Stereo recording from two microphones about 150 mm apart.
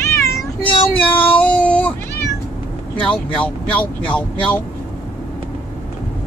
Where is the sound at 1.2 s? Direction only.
10° left (ahead or behind).